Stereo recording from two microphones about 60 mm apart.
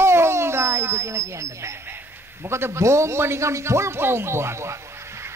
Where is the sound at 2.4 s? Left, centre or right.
Right.